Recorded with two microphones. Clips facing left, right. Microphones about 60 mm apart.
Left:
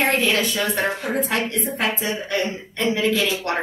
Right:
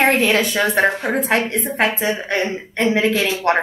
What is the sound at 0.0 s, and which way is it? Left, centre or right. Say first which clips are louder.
A woman's voice: right 4 dB; right.